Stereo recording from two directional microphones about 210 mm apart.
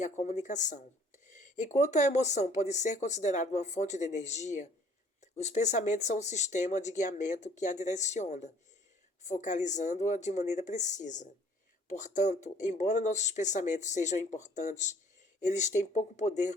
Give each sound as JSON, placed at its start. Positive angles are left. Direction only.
{"t": 0.0, "sound": "speech", "side_deg": 35}